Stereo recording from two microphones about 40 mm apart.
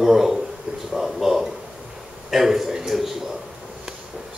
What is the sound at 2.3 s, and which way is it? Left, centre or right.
Speech, centre.